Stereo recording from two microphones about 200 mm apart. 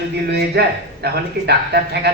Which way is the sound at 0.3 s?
55° right (ahead or behind).